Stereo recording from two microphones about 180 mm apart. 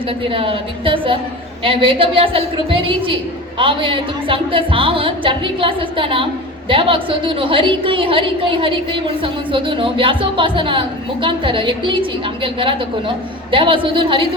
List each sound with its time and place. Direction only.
0.3 s a woman's voice: 30° right (ahead or behind)